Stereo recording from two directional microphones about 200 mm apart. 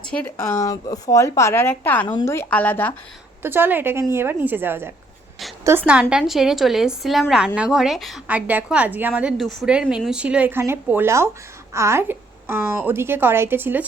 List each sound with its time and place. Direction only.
0.0 s speech: 5° left (ahead or behind)
3.4 s a woman's voice: 10° right (ahead or behind)